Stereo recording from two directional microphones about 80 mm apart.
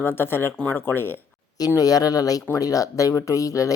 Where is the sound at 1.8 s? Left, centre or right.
Left.